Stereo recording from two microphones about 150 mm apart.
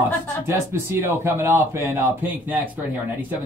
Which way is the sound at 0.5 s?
15° right (ahead or behind).